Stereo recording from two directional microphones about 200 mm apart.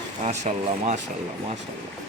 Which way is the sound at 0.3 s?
40° right (ahead or behind).